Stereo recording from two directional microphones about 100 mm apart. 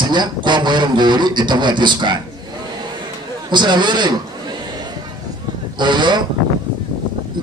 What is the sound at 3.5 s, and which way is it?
A man's voice, 50° right (ahead or behind).